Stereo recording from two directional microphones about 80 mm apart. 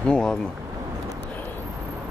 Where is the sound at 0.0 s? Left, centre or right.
Centre.